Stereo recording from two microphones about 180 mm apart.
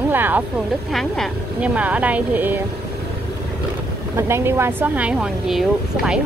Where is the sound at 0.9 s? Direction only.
Centre (ahead or behind).